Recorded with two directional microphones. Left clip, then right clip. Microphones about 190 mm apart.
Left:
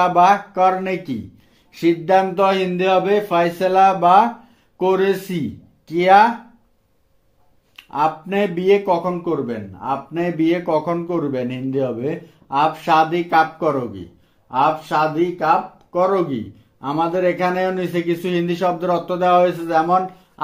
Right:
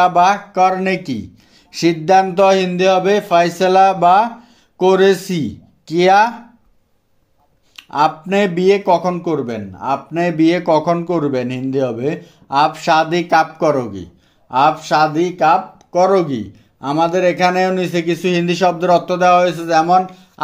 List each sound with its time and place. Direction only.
0.0 s speech: 35° right (ahead or behind)
7.7 s speech: 35° right (ahead or behind)